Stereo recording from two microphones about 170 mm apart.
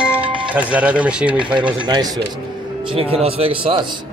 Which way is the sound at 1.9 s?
25° right (ahead or behind).